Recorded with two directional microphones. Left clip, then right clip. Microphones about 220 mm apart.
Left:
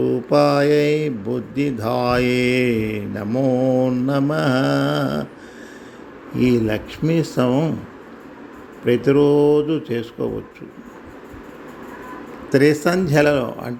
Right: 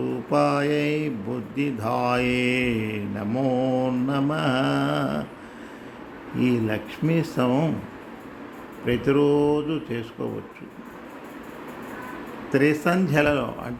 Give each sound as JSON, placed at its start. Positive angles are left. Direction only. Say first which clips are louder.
{"t": 0.0, "sound": "speech", "louder": "left 6 dB", "side_deg": 20}
{"t": 6.3, "sound": "speech", "louder": "left 6 dB", "side_deg": 20}
{"t": 8.8, "sound": "speech", "louder": "left 6 dB", "side_deg": 15}
{"t": 12.5, "sound": "speech", "louder": "left 5 dB", "side_deg": 20}